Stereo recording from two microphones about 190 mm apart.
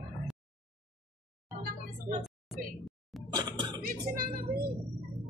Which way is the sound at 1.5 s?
50° right (ahead or behind).